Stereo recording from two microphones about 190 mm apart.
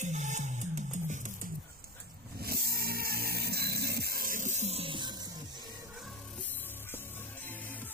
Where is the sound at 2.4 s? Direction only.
55° right (ahead or behind); by 5.1 s 25° right (ahead or behind).